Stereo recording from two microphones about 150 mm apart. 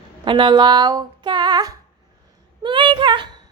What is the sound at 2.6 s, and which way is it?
Speech, 30° right (ahead or behind).